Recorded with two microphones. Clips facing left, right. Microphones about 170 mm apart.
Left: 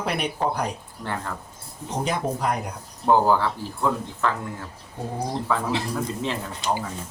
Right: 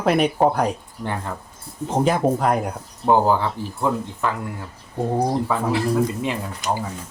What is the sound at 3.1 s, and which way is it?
Speech, 15° right (ahead or behind).